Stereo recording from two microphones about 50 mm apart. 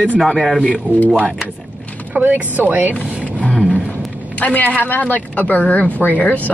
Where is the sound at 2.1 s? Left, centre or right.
Right.